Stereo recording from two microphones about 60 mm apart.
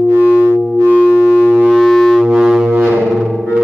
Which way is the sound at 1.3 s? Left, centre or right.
Left.